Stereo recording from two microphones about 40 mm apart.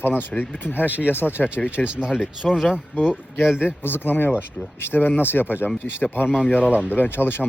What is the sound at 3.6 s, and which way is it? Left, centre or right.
Speech, left.